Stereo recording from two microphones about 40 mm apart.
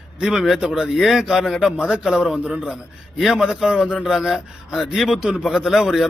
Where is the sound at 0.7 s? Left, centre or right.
Centre.